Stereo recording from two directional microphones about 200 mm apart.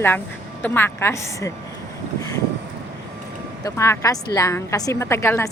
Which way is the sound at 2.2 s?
15° left (ahead or behind).